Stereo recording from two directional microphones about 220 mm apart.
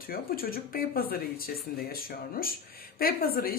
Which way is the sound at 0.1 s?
40° left (ahead or behind).